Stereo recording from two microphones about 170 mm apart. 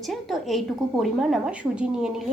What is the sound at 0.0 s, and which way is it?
A woman's voice, centre (ahead or behind).